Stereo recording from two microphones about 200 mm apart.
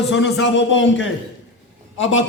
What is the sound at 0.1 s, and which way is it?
A man's voice, 65° left (ahead or behind).